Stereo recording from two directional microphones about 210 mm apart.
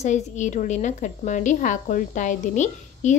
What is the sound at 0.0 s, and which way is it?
A woman's voice, 35° left (ahead or behind).